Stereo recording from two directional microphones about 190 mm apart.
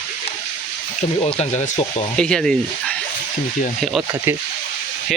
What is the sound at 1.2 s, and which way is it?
Speech, 30° left (ahead or behind).